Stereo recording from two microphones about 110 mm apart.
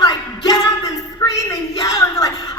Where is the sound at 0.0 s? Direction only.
40° left (ahead or behind).